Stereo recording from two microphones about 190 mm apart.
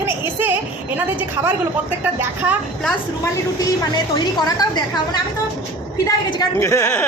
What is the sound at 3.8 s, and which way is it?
A woman's voice, 20° left (ahead or behind).